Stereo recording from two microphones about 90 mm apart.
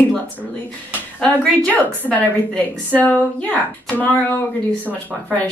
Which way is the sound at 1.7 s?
15° left (ahead or behind).